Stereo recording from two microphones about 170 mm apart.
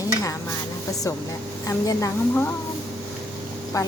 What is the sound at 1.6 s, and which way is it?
Speech, 20° left (ahead or behind).